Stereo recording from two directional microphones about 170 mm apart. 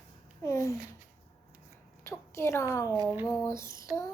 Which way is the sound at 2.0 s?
15° left (ahead or behind).